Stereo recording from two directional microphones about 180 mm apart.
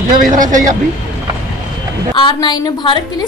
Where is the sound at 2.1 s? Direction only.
25° left (ahead or behind).